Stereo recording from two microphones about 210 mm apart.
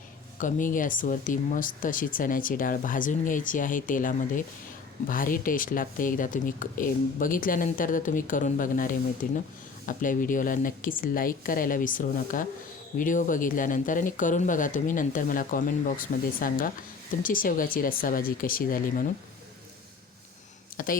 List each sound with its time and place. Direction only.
0.3 s speech: 40° left (ahead or behind)
20.7 s speech: 40° left (ahead or behind)